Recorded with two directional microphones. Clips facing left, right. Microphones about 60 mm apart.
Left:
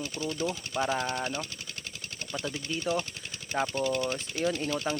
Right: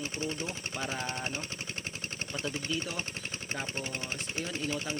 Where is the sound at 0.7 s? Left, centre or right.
Left.